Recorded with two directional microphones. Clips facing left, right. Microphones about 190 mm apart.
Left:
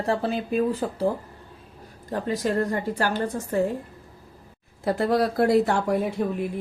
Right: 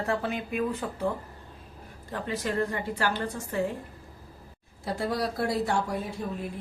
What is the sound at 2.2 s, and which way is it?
A woman's voice, 40° left (ahead or behind).